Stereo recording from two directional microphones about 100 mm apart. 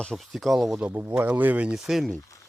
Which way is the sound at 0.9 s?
20° right (ahead or behind).